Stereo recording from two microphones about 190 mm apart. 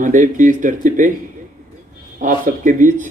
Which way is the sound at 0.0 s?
45° right (ahead or behind).